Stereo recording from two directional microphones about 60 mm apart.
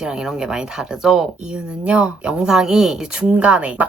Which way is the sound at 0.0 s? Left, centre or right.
Centre.